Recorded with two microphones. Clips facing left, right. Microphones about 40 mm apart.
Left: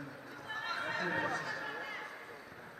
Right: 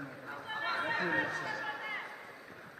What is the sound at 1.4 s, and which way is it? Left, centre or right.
Chatter, right.